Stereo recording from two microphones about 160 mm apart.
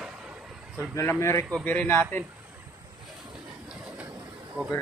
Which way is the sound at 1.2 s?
15° left (ahead or behind).